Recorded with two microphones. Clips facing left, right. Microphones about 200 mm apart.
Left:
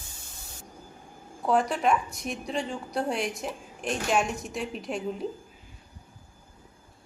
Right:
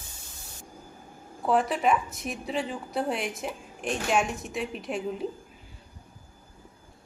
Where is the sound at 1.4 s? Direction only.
Centre (ahead or behind).